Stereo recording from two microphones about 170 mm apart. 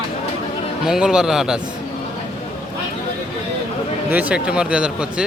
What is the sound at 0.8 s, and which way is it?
Speech, 5° right (ahead or behind).